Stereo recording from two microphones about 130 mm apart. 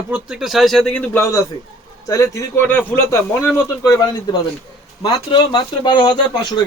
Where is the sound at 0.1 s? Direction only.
5° right (ahead or behind).